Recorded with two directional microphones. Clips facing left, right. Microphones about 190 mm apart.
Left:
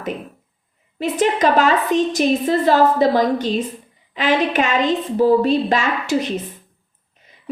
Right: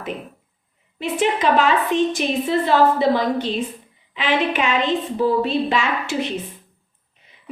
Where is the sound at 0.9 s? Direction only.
40° left (ahead or behind).